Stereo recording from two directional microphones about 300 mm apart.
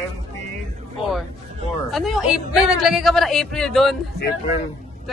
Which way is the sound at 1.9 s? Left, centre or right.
Centre.